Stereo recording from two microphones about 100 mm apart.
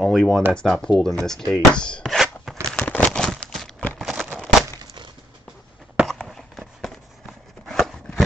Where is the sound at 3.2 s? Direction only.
5° left (ahead or behind).